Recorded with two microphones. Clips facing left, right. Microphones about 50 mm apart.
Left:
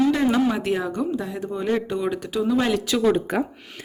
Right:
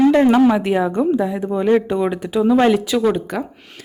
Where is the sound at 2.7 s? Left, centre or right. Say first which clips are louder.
Right 4 dB; centre.